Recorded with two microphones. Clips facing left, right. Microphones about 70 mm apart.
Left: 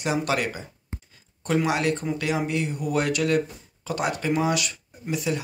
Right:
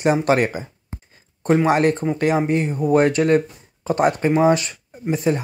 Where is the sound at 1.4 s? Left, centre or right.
Right.